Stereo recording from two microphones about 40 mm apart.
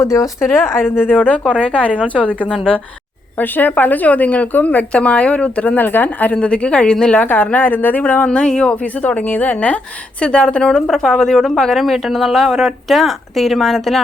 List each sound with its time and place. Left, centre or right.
0.4 s speech: left
1.1 s speech: left
1.5 s a woman's voice: left
2.5 s speech: left
3.3 s a woman's voice: left
4.9 s speech: left
5.7 s speech: left
6.3 s speech: left
7.3 s speech: left
8.3 s speech: left
8.7 s a woman's voice: left
10.7 s speech: centre